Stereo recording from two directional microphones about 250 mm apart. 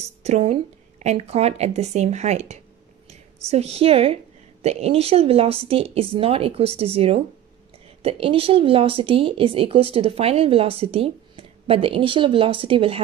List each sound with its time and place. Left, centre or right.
0.2 s speech: right